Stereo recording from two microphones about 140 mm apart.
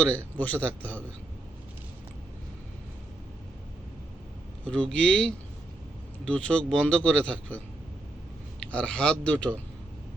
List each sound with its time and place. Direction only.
0.0 s a man's voice: 10° left (ahead or behind)
4.6 s a man's voice: 5° left (ahead or behind)
8.7 s a man's voice: 5° left (ahead or behind)